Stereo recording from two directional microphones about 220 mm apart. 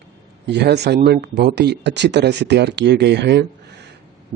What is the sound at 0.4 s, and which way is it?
Speech, 50° right (ahead or behind).